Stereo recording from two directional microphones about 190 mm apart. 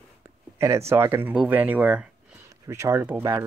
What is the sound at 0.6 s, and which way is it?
Speech, 15° right (ahead or behind).